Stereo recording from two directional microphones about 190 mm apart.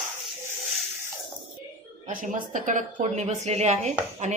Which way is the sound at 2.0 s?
40° right (ahead or behind).